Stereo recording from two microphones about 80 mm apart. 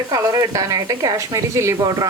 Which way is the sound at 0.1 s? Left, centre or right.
Right.